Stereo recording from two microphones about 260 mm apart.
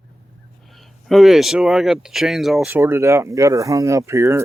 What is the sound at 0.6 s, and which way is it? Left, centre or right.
Speech, centre.